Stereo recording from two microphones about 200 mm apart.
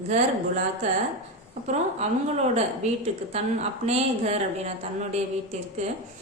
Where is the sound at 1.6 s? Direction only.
35° right (ahead or behind).